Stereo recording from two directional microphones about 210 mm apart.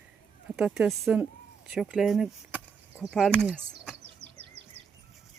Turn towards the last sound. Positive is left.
turn(degrees=-55)  # may be behind; listen again after turning